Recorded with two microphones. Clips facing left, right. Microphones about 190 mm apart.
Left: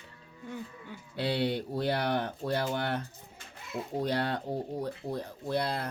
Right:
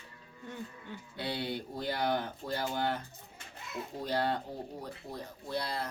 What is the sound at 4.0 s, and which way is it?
Speech, 70° left (ahead or behind).